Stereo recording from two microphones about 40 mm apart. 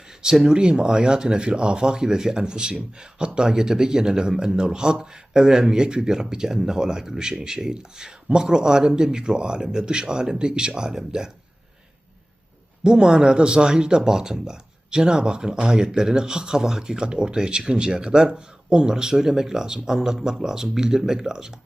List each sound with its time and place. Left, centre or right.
0.2 s speech: centre
12.8 s speech: centre